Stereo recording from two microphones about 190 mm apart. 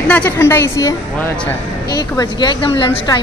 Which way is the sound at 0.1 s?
10° left (ahead or behind).